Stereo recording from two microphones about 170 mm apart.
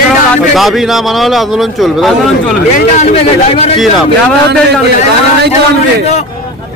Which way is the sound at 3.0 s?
40° left (ahead or behind).